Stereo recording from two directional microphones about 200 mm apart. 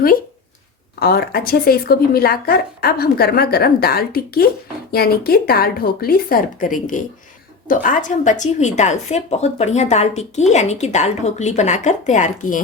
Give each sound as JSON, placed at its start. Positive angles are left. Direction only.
{"t": 0.9, "sound": "a woman's voice", "side_deg": 50}